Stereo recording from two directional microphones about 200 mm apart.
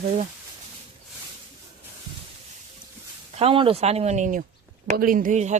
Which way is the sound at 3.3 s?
30° right (ahead or behind).